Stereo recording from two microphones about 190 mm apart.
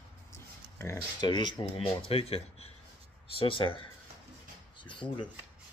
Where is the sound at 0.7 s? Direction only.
15° left (ahead or behind).